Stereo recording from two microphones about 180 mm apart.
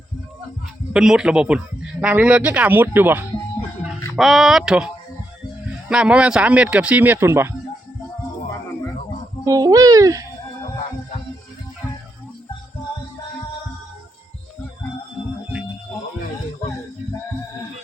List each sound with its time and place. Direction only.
0.9 s speech: 5° right (ahead or behind)
4.2 s speech: centre (ahead or behind)
5.9 s speech: 5° right (ahead or behind)
9.4 s a child's voice: 20° right (ahead or behind)